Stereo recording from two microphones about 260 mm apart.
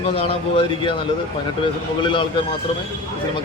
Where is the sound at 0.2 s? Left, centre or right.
Left.